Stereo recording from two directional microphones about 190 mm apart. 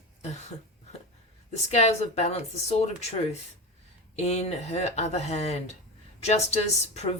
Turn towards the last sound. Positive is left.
turn(degrees=35)  # may be behind; listen again after turning